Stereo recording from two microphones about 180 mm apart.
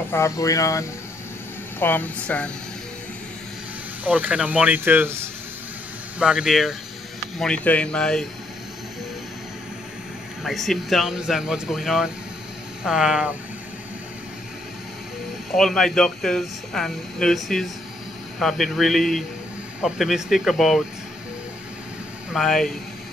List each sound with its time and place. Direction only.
0.1 s speech: 15° left (ahead or behind)
4.0 s speech: 10° right (ahead or behind)
10.4 s speech: centre (ahead or behind)
15.5 s speech: centre (ahead or behind)
22.3 s speech: centre (ahead or behind)